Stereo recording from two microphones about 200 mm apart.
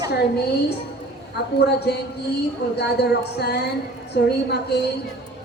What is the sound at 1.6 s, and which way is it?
A man's voice, 55° left (ahead or behind).